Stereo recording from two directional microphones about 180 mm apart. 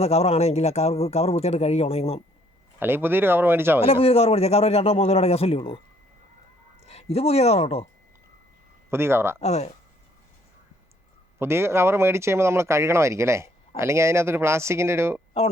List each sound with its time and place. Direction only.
0.0 s a man's voice: 35° left (ahead or behind)
2.7 s speech: 10° right (ahead or behind)
3.8 s a man's voice: 30° left (ahead or behind)
6.8 s speech: 35° left (ahead or behind)
8.9 s speech: 15° right (ahead or behind)
9.4 s a man's voice: 40° left (ahead or behind)
11.3 s speech: 15° right (ahead or behind)